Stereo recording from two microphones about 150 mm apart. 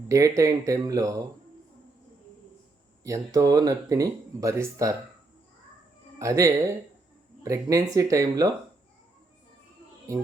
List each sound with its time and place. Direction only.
0.1 s speech: 20° right (ahead or behind)
3.0 s speech: 20° right (ahead or behind)
6.1 s speech: 20° right (ahead or behind)